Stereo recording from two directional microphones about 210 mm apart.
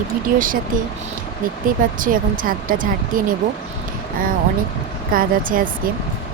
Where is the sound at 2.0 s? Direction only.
40° right (ahead or behind).